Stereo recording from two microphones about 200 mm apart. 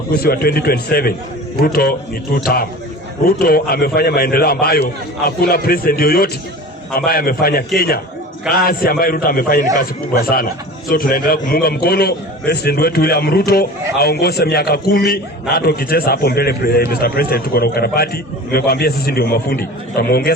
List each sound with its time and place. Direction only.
0.1 s a man's voice: 50° left (ahead or behind)
3.2 s a man's voice: 50° left (ahead or behind)